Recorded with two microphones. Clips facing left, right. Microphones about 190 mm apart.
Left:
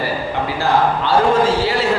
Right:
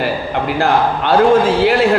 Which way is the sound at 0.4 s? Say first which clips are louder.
Right 2 dB; 60° right (ahead or behind).